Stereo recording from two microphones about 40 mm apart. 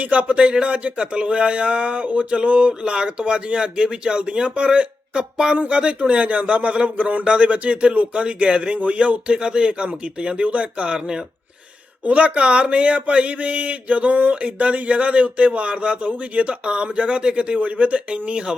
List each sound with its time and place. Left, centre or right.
0.0 s speech: right
10.9 s speech: centre
12.0 s speech: right